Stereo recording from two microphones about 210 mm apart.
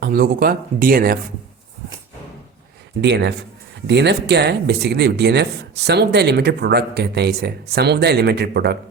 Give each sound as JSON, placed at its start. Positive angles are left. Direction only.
{"t": 0.0, "sound": "speech", "side_deg": -45}
{"t": 3.0, "sound": "speech", "side_deg": -55}